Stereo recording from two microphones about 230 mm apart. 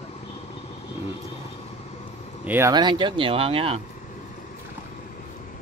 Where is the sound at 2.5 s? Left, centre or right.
Centre.